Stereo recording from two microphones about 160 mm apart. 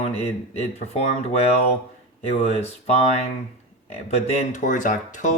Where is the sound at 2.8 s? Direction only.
40° left (ahead or behind).